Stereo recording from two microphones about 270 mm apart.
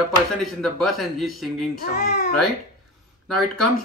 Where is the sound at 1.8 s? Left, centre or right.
Left.